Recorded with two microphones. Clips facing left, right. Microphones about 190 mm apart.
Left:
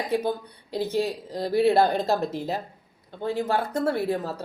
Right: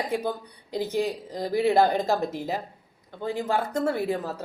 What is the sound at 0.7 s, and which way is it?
Speech, 15° right (ahead or behind).